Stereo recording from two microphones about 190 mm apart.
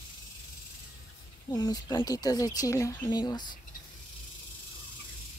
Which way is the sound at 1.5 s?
20° left (ahead or behind).